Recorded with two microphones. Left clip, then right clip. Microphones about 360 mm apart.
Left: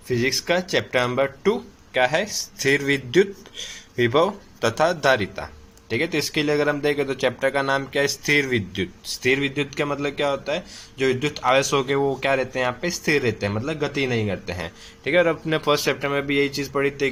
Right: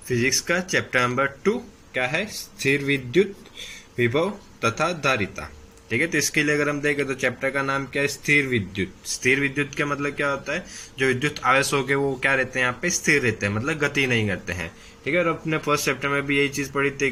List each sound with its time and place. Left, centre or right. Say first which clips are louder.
0.1 s speech: left 1 dB; centre